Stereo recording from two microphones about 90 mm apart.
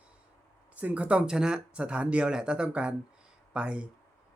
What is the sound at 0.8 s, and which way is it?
Speech, 15° right (ahead or behind).